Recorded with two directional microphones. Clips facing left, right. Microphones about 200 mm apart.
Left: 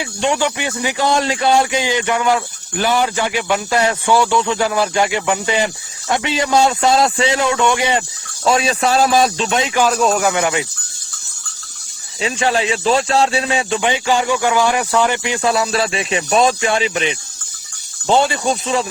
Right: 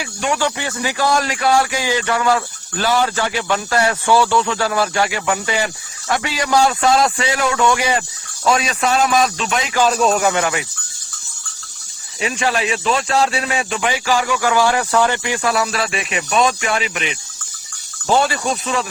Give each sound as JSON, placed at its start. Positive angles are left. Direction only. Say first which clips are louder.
{"t": 0.0, "sound": "speech", "louder": "left 2 dB", "side_deg": 25}
{"t": 9.9, "sound": "speech", "louder": "even", "side_deg": 0}
{"t": 10.3, "sound": "speech", "louder": "left 2 dB", "side_deg": 20}
{"t": 12.2, "sound": "speech", "louder": "left 2 dB", "side_deg": 30}